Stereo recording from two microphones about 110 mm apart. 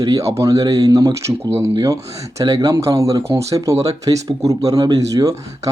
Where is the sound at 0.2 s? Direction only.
25° right (ahead or behind).